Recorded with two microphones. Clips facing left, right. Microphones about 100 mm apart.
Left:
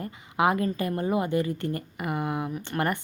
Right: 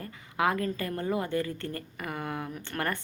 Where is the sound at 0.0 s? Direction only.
20° left (ahead or behind).